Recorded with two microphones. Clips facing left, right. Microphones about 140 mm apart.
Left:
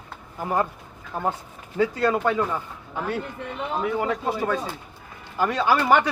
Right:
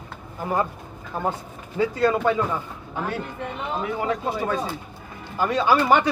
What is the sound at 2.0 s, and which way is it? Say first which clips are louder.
Speech: right 4 dB; 5° left (ahead or behind).